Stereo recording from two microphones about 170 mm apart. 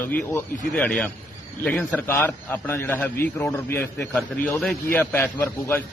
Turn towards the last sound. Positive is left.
turn(degrees=10)  # may be behind; listen again after turning